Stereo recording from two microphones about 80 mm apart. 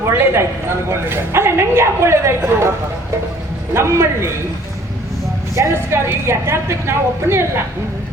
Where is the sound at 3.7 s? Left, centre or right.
Right.